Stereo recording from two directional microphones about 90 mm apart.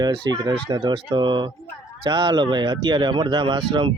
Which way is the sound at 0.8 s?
60° right (ahead or behind).